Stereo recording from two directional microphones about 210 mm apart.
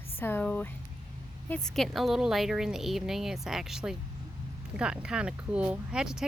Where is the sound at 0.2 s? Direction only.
10° left (ahead or behind).